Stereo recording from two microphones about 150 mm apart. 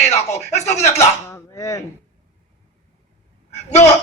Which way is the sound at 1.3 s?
20° left (ahead or behind).